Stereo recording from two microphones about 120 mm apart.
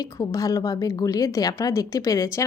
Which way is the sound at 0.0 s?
30° left (ahead or behind).